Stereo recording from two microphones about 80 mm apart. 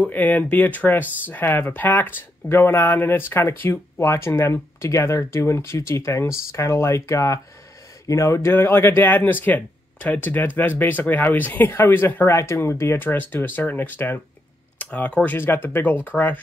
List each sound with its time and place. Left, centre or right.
0.0 s speech: left